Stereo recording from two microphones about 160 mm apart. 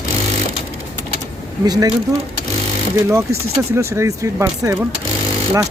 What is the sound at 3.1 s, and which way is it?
Speech, 15° right (ahead or behind).